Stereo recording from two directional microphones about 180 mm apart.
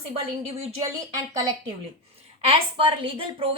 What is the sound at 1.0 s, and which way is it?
Speech, 15° right (ahead or behind).